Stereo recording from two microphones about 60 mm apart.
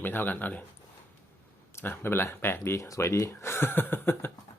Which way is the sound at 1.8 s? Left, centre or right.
Left.